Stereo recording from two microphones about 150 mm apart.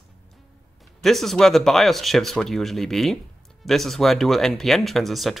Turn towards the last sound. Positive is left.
turn(degrees=0)  # may be behind; listen again after turning